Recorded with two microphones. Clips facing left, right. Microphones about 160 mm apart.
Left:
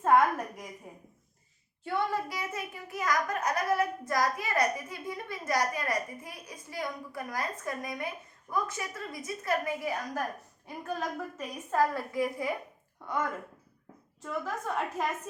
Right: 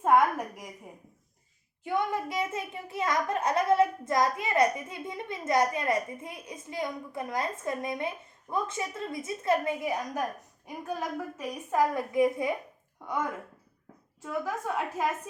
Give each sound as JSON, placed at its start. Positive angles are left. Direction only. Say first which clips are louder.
{"t": 0.0, "sound": "a sound", "louder": "right 1 dB", "side_deg": -10}
{"t": 1.8, "sound": "a child's voice", "louder": "right 1 dB", "side_deg": -15}
{"t": 14.2, "sound": "a woman's voice", "louder": "right 2 dB", "side_deg": -5}